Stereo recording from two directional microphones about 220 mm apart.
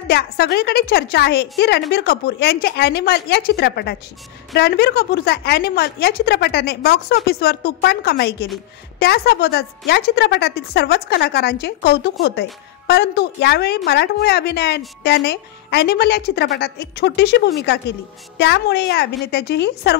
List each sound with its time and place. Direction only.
0.1 s a woman's voice: 45° left (ahead or behind)